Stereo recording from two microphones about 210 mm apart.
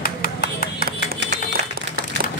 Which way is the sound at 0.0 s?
40° left (ahead or behind).